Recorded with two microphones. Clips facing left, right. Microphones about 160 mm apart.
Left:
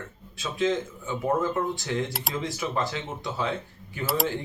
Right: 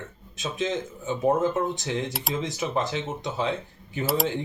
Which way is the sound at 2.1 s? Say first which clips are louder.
Right 2 dB; centre (ahead or behind).